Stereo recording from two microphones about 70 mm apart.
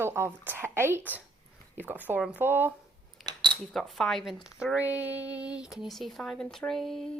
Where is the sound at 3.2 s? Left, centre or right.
Right.